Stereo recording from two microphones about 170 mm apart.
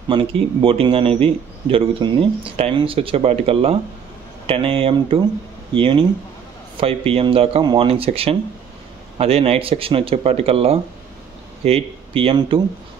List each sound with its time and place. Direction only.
0.1 s a man's voice: 30° right (ahead or behind)